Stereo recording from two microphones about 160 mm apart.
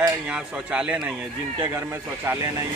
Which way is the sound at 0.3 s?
5° right (ahead or behind).